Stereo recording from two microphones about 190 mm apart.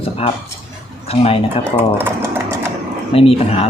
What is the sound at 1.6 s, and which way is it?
Typing, 10° right (ahead or behind).